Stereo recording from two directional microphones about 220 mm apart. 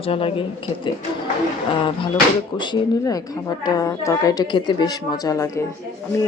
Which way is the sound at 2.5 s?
20° left (ahead or behind).